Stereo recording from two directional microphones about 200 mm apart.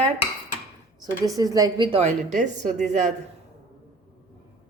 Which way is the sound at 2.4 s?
35° right (ahead or behind).